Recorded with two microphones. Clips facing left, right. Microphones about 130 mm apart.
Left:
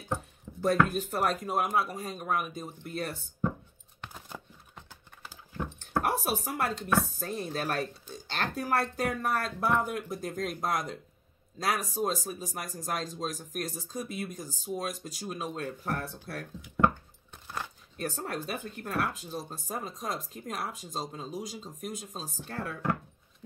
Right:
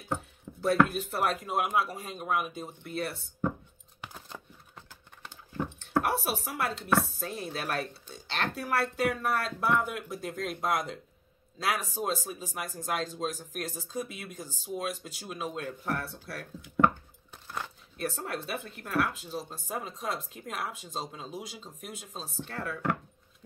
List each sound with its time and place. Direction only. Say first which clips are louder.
0.7 s speech: right 1 dB; 40° left (ahead or behind)
4.0 s a sound: even; 10° right (ahead or behind)
6.0 s a woman's voice: left 1 dB; 40° left (ahead or behind)
17.9 s speech: even; 40° left (ahead or behind)